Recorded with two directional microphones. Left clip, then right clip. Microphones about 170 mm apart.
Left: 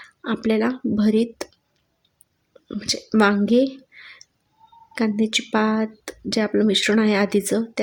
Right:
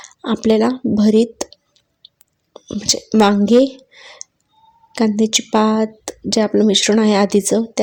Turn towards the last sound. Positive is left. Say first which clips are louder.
# right 6 dB
turn(degrees=-15)  # may be behind; listen again after turning